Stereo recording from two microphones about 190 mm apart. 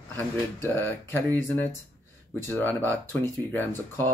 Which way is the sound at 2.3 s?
10° left (ahead or behind).